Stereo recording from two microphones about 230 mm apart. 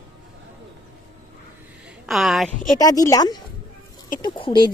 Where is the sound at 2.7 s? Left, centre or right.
Centre.